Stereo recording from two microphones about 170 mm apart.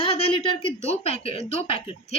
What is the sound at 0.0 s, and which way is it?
A woman's voice, 35° left (ahead or behind).